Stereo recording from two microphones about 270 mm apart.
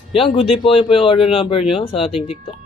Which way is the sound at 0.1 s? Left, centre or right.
Centre.